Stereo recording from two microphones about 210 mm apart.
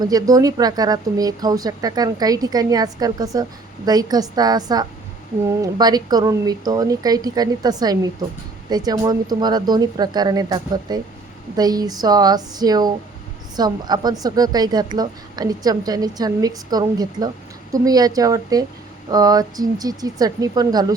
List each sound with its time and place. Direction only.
0.0 s a woman's voice: 15° right (ahead or behind)